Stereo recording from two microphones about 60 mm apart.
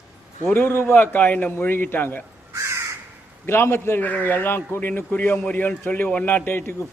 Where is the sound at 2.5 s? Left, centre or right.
Right.